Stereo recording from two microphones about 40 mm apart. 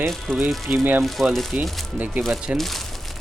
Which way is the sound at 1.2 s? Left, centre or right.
Centre.